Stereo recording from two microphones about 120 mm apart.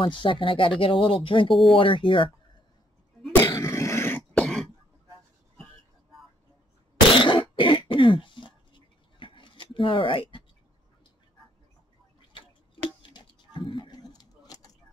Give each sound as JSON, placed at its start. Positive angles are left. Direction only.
{"t": 0.0, "sound": "speech", "side_deg": 45}
{"t": 1.5, "sound": "speech", "side_deg": 0}
{"t": 1.8, "sound": "speech", "side_deg": 45}
{"t": 3.4, "sound": "a sound", "side_deg": 25}
{"t": 4.3, "sound": "throat clearing", "side_deg": 5}
{"t": 7.2, "sound": "throat clearing", "side_deg": 45}
{"t": 13.0, "sound": "a sound", "side_deg": 40}